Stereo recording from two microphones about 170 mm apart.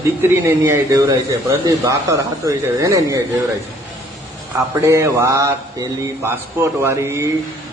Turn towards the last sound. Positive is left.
turn(degrees=-15)  # may be behind; listen again after turning